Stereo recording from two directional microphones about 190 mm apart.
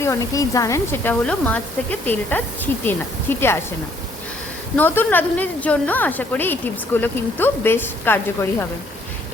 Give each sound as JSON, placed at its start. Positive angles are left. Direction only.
{"t": 0.0, "sound": "a woman's voice", "side_deg": 15}
{"t": 4.8, "sound": "a woman's voice", "side_deg": 10}